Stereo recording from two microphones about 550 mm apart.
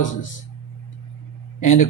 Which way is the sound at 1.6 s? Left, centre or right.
Left.